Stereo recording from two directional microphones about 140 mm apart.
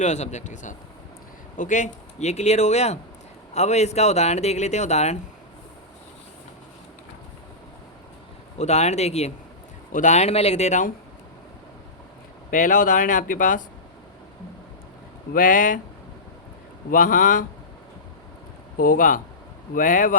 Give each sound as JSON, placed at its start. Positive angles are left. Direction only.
{"t": 0.0, "sound": "speech", "side_deg": 55}
{"t": 8.5, "sound": "speech", "side_deg": 55}
{"t": 9.9, "sound": "speech", "side_deg": 60}
{"t": 12.5, "sound": "speech", "side_deg": 70}
{"t": 15.3, "sound": "speech", "side_deg": 80}
{"t": 16.9, "sound": "speech", "side_deg": 70}
{"t": 18.8, "sound": "speech", "side_deg": 85}